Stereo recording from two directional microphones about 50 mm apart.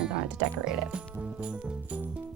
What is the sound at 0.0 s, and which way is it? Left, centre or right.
Music, centre.